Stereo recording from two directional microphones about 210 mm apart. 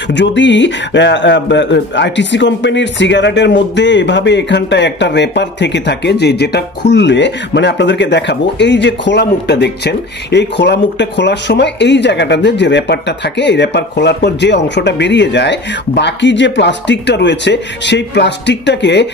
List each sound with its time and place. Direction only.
0.1 s speech: 60° left (ahead or behind)